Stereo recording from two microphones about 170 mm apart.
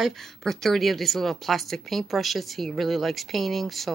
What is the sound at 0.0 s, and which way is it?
Speech, centre (ahead or behind).